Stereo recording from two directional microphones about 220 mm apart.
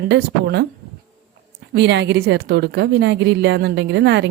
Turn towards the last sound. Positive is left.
turn(degrees=-50)  # may be behind; listen again after turning